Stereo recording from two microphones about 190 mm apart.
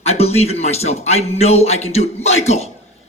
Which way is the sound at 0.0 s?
35° left (ahead or behind).